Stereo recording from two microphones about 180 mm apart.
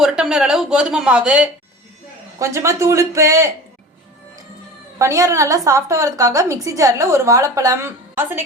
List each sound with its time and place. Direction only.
0.0 s speech: 5° right (ahead or behind)
2.4 s a woman's voice: 15° right (ahead or behind)
4.9 s a woman's voice: 15° right (ahead or behind)